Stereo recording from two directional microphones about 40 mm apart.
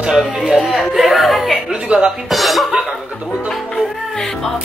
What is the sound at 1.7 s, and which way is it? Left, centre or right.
Music, centre.